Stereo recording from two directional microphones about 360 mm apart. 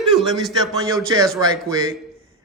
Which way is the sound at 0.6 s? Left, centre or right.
Centre.